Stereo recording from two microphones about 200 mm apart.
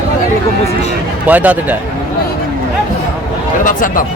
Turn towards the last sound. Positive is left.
turn(degrees=45)  # may be behind; listen again after turning